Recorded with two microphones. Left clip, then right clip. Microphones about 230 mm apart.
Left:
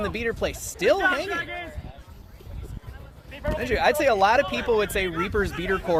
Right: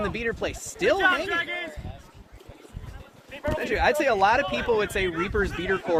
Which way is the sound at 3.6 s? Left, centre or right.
Left.